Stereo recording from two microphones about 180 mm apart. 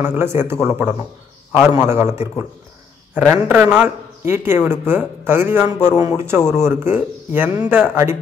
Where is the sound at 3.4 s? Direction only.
5° right (ahead or behind).